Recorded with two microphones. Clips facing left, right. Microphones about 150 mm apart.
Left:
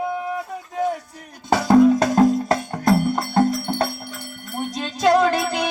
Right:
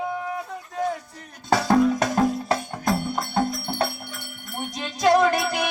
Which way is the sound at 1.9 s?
35° left (ahead or behind).